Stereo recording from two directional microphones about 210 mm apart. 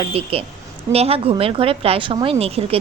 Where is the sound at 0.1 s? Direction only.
25° right (ahead or behind).